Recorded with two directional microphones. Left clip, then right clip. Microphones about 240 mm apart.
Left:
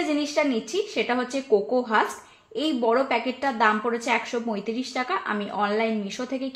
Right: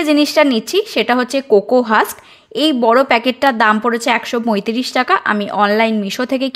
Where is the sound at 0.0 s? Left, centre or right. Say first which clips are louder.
Right 12 dB; right.